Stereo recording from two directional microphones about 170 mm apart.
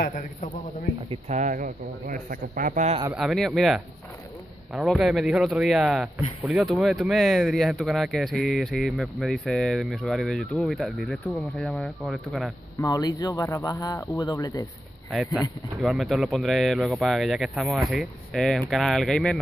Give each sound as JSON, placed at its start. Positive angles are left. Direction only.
{"t": 1.1, "sound": "speech", "side_deg": -45}
{"t": 2.9, "sound": "speech", "side_deg": -30}
{"t": 3.2, "sound": "speech", "side_deg": 0}
{"t": 12.7, "sound": "speech", "side_deg": 20}
{"t": 15.1, "sound": "speech", "side_deg": 0}